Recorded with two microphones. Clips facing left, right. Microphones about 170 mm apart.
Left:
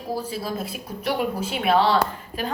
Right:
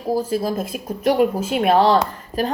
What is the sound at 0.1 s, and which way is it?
Speech, 45° right (ahead or behind).